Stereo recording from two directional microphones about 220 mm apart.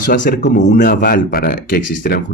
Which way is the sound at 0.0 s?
40° left (ahead or behind).